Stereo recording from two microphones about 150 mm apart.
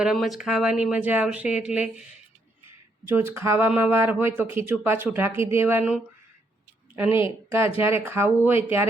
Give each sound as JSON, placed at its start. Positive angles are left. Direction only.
{"t": 0.0, "sound": "speech", "side_deg": 0}
{"t": 3.1, "sound": "a woman's voice", "side_deg": -15}